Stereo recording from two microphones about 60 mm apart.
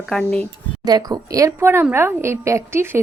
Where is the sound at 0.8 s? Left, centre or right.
Right.